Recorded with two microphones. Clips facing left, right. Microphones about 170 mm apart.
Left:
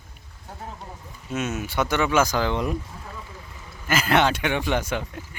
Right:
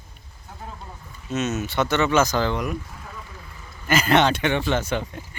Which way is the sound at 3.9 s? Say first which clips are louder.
Right 2 dB; 5° left (ahead or behind).